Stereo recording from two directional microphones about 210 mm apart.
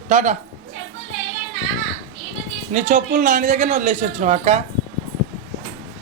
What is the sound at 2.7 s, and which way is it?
A man's voice, 35° right (ahead or behind).